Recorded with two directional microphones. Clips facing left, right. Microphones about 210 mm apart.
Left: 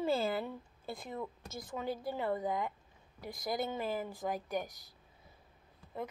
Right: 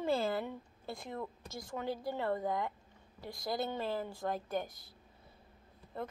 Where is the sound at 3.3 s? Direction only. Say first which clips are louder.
Even; 20° left (ahead or behind).